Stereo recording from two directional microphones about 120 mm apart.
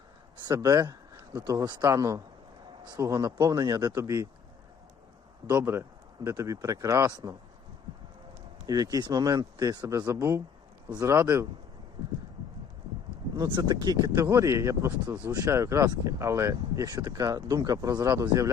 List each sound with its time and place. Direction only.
0.6 s a sound: 30° right (ahead or behind)
1.4 s speech: 25° right (ahead or behind)
1.6 s speech: 35° right (ahead or behind)
1.9 s speech: 25° right (ahead or behind)
5.5 s speech: 20° right (ahead or behind)
8.6 s speech: 30° right (ahead or behind)
13.3 s speech: 30° right (ahead or behind)